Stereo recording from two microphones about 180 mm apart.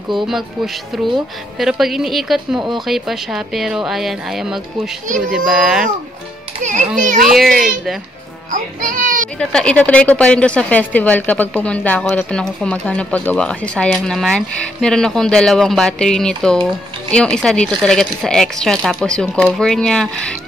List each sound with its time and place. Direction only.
0.9 s a woman's voice: centre (ahead or behind)
7.0 s a child's voice: 45° right (ahead or behind)
7.2 s a woman's voice: centre (ahead or behind)
8.5 s a child's voice: 50° right (ahead or behind)
9.4 s a woman's voice: 5° left (ahead or behind)